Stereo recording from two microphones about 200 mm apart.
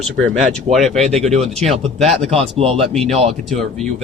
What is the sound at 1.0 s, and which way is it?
Speech, 30° right (ahead or behind).